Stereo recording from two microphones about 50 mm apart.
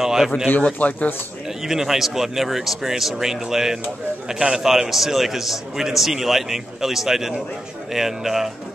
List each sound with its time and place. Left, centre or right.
0.0 s a sound: centre
0.6 s speech: left
1.6 s a man's voice: centre